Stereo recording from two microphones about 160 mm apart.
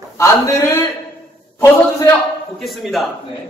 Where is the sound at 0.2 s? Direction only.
20° left (ahead or behind).